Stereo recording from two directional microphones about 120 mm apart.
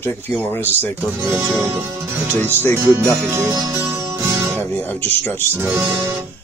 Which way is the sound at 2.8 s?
20° right (ahead or behind).